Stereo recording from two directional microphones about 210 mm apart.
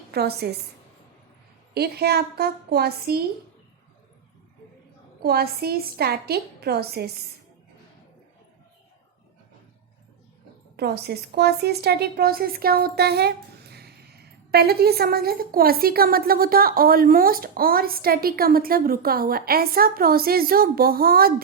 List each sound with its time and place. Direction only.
0.1 s a woman's voice: 50° right (ahead or behind)
1.7 s speech: 50° right (ahead or behind)
5.2 s speech: 50° right (ahead or behind)
10.8 s speech: 50° right (ahead or behind)